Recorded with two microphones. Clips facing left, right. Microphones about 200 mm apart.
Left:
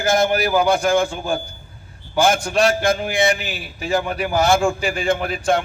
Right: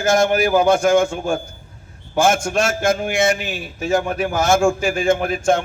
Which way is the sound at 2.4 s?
45° right (ahead or behind).